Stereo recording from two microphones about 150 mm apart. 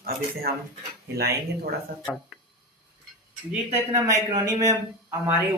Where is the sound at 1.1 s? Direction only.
90° right.